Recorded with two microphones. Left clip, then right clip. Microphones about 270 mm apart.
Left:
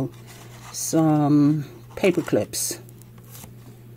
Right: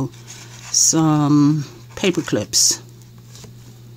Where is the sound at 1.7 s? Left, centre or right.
Right.